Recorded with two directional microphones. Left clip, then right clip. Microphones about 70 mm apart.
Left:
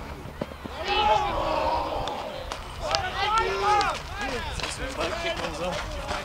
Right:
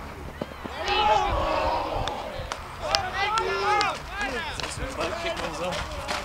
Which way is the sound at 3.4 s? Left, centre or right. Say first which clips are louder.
Left 1 dB; centre.